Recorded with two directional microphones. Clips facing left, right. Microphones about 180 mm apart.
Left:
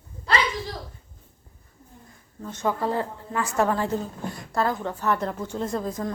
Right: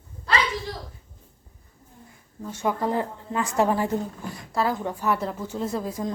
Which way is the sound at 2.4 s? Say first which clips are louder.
Even; 10° right (ahead or behind).